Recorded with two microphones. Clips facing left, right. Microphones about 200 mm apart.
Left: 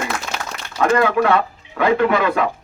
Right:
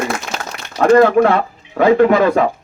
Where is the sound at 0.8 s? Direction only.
40° right (ahead or behind).